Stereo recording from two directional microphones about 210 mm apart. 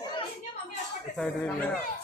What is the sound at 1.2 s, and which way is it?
Speech, 10° left (ahead or behind).